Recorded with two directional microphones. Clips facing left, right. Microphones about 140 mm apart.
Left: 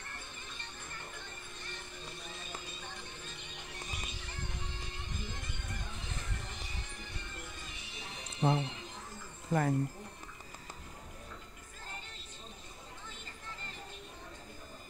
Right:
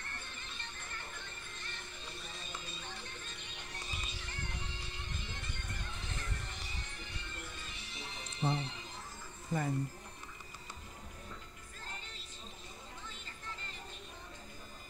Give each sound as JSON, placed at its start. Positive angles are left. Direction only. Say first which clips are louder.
{"t": 0.4, "sound": "music", "louder": "left 1 dB", "side_deg": 10}
{"t": 3.0, "sound": "music", "louder": "left 1 dB", "side_deg": 10}
{"t": 8.4, "sound": "speech", "louder": "left 5 dB", "side_deg": 55}
{"t": 9.5, "sound": "speech", "louder": "left 5 dB", "side_deg": 65}